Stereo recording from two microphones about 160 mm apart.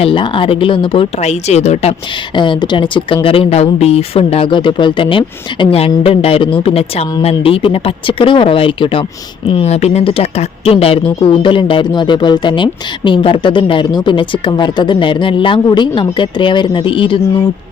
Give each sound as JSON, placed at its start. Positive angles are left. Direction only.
{"t": 0.0, "sound": "speech", "side_deg": 30}
{"t": 2.3, "sound": "speech", "side_deg": 30}